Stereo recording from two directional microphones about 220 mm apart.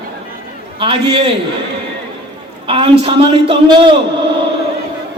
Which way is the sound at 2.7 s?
25° right (ahead or behind).